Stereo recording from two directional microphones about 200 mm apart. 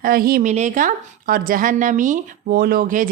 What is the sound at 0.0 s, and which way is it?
A woman's voice, 45° right (ahead or behind).